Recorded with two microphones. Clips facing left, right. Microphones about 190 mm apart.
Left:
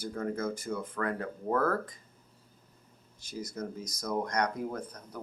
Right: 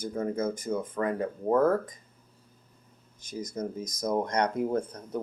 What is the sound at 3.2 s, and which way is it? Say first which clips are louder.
Speech: right 4 dB; 20° right (ahead or behind).